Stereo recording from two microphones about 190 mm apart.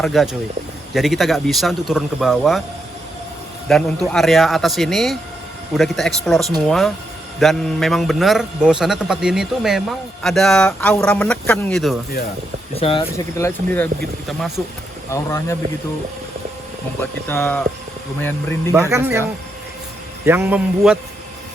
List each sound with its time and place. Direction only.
0.0 s a man's voice: centre (ahead or behind)
3.7 s a man's voice: centre (ahead or behind)
12.8 s speech: 30° left (ahead or behind)
13.1 s speech: 10° left (ahead or behind)
14.3 s a man's voice: centre (ahead or behind)
15.1 s speech: 15° left (ahead or behind)
17.0 s speech: 10° left (ahead or behind)
18.7 s a man's voice: 15° right (ahead or behind)
20.2 s a man's voice: 10° right (ahead or behind)